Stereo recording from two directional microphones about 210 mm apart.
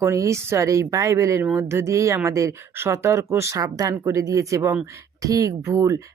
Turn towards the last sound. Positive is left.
turn(degrees=-15)  # may be behind; listen again after turning